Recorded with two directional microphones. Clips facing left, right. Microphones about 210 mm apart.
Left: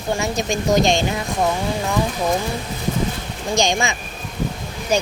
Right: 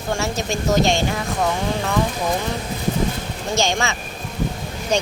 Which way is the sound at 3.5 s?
15° left (ahead or behind).